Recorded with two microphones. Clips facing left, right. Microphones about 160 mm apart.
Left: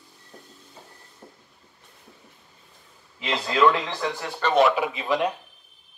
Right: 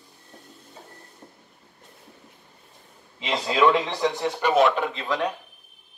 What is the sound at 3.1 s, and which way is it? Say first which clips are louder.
A man's voice: right 1 dB; 15° right (ahead or behind).